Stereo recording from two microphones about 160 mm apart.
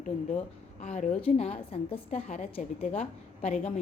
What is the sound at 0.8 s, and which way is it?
A woman's voice, 50° left (ahead or behind).